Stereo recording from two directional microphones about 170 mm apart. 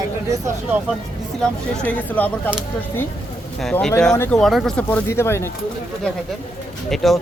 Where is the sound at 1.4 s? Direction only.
10° left (ahead or behind).